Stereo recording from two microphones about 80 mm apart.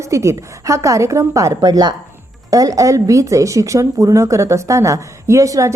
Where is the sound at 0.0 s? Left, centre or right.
Right.